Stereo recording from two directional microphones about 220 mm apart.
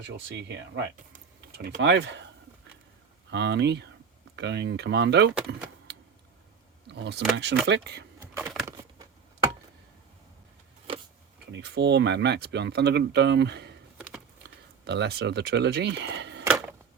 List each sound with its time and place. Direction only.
0.3 s speech: 50° right (ahead or behind)
1.1 s a sound: 40° right (ahead or behind)
3.2 s speech: 50° right (ahead or behind)
6.8 s speech: 50° right (ahead or behind)
8.4 s a sound: 10° right (ahead or behind)
11.5 s speech: 50° right (ahead or behind)
14.8 s speech: 50° right (ahead or behind)